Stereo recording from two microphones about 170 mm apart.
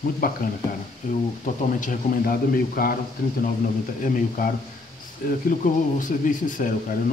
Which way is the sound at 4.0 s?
55° left (ahead or behind).